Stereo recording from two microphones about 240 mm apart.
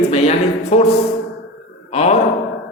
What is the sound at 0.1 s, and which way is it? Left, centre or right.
Speech, left.